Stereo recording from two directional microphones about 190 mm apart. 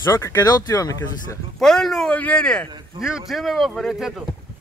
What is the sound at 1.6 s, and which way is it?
Speech, centre (ahead or behind).